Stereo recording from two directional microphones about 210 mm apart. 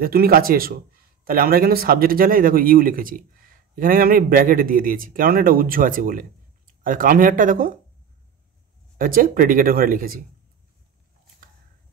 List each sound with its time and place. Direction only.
0.0 s speech: 45° right (ahead or behind)
8.9 s speech: 40° right (ahead or behind)